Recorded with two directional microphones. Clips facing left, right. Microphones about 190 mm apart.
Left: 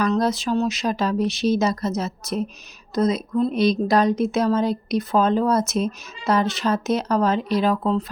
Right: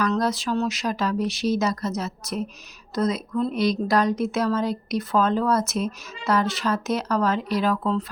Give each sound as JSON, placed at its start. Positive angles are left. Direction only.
{"t": 0.1, "sound": "a woman's voice", "side_deg": 20}